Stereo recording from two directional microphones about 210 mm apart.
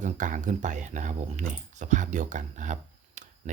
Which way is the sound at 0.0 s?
35° right (ahead or behind).